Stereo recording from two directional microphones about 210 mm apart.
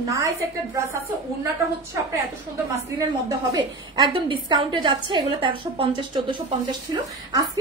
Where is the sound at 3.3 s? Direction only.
15° right (ahead or behind).